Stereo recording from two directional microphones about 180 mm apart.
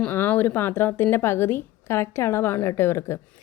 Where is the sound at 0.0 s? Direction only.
10° left (ahead or behind).